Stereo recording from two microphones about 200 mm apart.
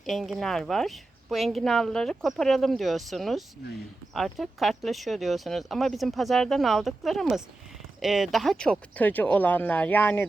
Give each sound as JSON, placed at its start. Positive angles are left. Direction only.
{"t": 0.0, "sound": "speech", "side_deg": 0}